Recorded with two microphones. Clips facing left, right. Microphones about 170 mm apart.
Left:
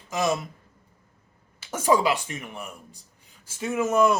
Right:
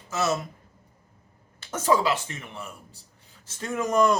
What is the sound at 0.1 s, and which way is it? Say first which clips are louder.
Speech: left 1 dB; 15° left (ahead or behind).